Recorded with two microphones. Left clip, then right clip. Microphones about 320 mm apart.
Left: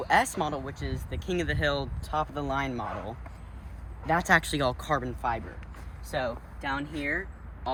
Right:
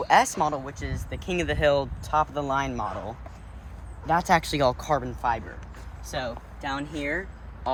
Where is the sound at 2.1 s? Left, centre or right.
Centre.